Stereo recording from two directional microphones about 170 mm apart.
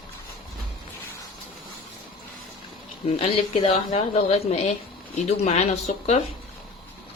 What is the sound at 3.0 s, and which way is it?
A woman's voice, 35° left (ahead or behind).